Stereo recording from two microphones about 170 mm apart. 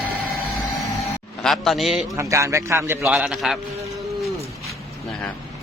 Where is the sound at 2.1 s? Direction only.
20° right (ahead or behind).